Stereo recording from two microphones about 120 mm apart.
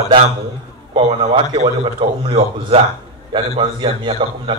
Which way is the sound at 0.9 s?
55° right (ahead or behind).